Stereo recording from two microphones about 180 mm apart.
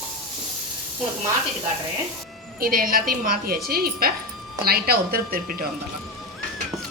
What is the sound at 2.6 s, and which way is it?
A woman's voice, 55° right (ahead or behind).